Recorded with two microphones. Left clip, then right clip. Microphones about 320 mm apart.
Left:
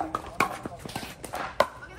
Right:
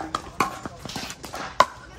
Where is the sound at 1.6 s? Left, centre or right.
Centre.